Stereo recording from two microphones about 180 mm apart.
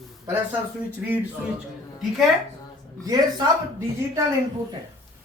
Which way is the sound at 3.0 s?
20° right (ahead or behind).